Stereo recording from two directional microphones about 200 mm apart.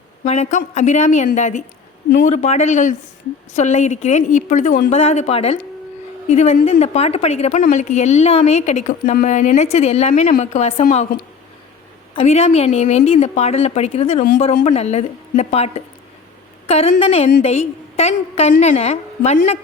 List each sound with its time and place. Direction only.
0.3 s a woman's voice: 35° left (ahead or behind)
2.0 s a man's voice: 50° left (ahead or behind)
2.3 s a woman's voice: 35° left (ahead or behind)
4.9 s a woman's voice: 30° left (ahead or behind)
12.1 s a woman's voice: 30° left (ahead or behind)